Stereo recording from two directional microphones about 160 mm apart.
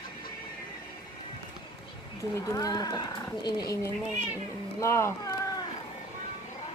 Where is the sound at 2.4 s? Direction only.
20° left (ahead or behind).